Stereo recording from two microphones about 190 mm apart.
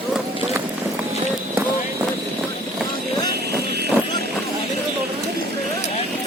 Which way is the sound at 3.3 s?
60° right (ahead or behind).